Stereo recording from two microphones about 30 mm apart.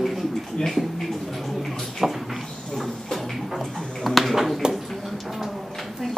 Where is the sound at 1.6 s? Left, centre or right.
Centre.